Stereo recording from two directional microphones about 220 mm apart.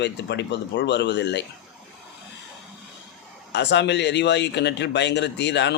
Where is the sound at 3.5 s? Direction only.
50° left (ahead or behind).